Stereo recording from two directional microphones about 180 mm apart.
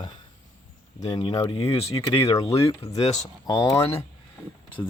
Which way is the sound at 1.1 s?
20° left (ahead or behind).